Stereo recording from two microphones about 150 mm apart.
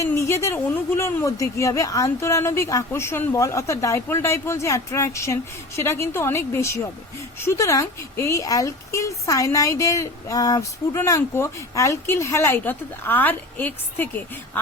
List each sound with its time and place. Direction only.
0.0 s speech: 20° left (ahead or behind)